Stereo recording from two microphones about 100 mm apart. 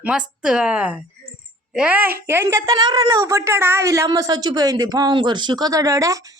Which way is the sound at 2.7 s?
40° right (ahead or behind).